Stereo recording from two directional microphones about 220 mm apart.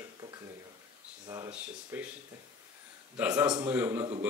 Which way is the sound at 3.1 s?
5° right (ahead or behind).